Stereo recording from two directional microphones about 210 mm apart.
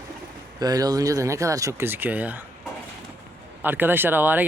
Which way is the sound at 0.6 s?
20° right (ahead or behind).